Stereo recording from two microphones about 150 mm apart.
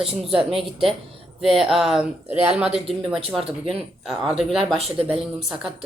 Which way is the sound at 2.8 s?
40° right (ahead or behind).